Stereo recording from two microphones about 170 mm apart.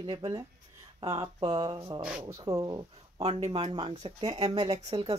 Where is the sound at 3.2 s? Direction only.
40° right (ahead or behind).